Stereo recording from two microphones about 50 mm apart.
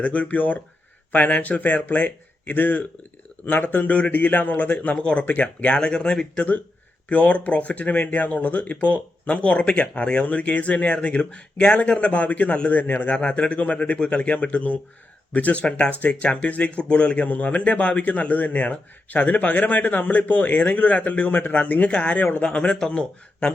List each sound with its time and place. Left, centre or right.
0.0 s a man's voice: left
5.7 s speech: centre; by 13.1 s left
13.1 s a man's voice: left